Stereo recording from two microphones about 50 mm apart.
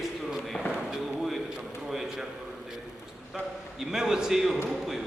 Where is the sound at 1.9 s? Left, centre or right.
Centre.